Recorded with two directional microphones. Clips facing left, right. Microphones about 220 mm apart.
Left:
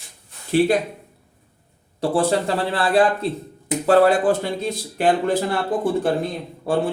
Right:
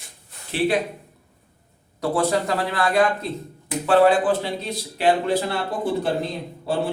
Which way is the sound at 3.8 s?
45° left (ahead or behind).